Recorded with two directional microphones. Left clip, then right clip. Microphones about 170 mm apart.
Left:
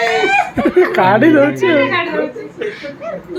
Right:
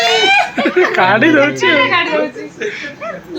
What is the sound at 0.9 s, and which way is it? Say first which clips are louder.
Speech: right 1 dB; 20° left (ahead or behind).